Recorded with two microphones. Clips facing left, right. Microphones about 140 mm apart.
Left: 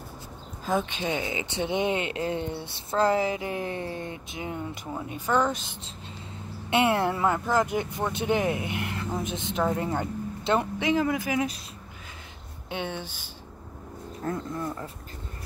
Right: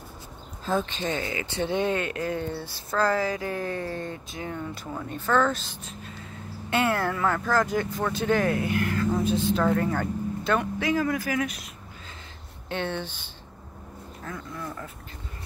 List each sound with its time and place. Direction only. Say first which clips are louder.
0.7 s speech: even; 10° left (ahead or behind)
6.7 s speech: left 2 dB; 20° left (ahead or behind)
12.6 s speech: right 3 dB; 10° left (ahead or behind)
14.5 s speech: left 4 dB; 20° left (ahead or behind)